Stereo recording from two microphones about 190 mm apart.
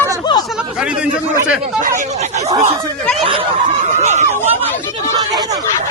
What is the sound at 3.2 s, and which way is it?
Snicker, 30° right (ahead or behind).